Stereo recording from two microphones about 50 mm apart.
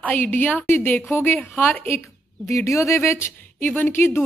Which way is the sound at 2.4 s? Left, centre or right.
Left.